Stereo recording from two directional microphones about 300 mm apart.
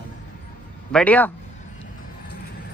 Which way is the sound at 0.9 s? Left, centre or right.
Centre.